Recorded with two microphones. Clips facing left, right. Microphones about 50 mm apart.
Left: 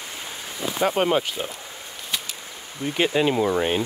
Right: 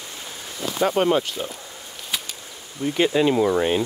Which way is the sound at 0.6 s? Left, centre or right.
Centre.